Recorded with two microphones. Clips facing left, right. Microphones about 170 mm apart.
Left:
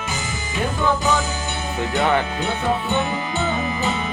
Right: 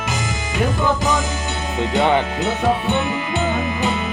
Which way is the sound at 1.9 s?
20° right (ahead or behind).